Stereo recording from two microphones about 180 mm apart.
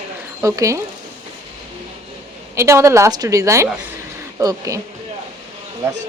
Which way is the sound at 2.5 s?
15° right (ahead or behind).